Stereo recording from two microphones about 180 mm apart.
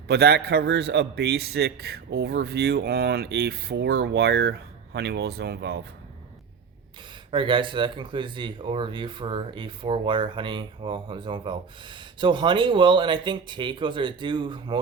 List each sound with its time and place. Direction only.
0.1 s a man's voice: 65° right (ahead or behind)
7.3 s speech: 25° right (ahead or behind)